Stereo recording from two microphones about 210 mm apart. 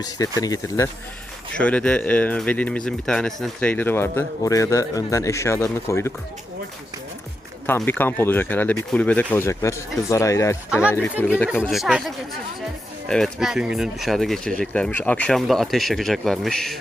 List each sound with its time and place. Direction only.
0.0 s speech: 20° left (ahead or behind)
7.7 s speech: 10° left (ahead or behind)